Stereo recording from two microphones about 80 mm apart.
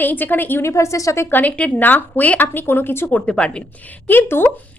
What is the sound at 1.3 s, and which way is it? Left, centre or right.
A woman's voice, left.